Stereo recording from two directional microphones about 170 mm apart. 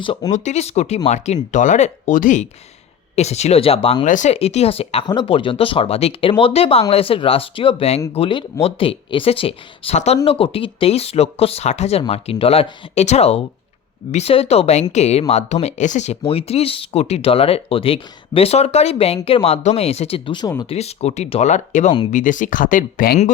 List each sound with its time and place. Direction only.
0.0 s speech: 25° left (ahead or behind)
0.3 s speech: 45° left (ahead or behind)
4.0 s speech: 45° left (ahead or behind); by 20.7 s 25° left (ahead or behind)
20.7 s speech: 40° left (ahead or behind)